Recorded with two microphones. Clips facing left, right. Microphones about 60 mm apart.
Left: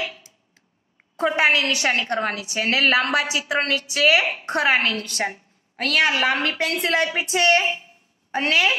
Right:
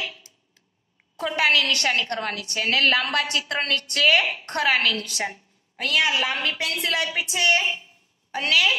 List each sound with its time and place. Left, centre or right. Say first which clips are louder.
0.0 s a sound: left 3 dB; left
1.1 s a woman's voice: left 3 dB; left
5.8 s a woman's voice: left 3 dB; left
7.2 s a woman's voice: left 3 dB; left
8.3 s a woman's voice: left 2 dB; left